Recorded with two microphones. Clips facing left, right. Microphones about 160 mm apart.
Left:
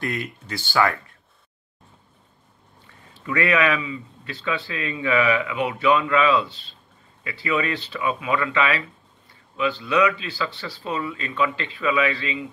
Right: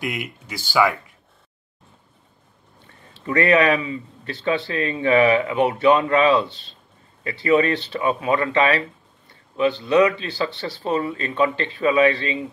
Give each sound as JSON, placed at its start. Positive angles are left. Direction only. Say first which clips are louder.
{"t": 0.0, "sound": "speech", "louder": "even", "side_deg": -10}
{"t": 3.3, "sound": "speech", "louder": "right 4 dB", "side_deg": -35}
{"t": 9.8, "sound": "speech", "louder": "right 3 dB", "side_deg": -30}